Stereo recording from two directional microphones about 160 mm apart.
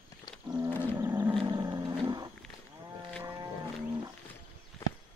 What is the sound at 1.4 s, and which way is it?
Roaring cats, 25° right (ahead or behind).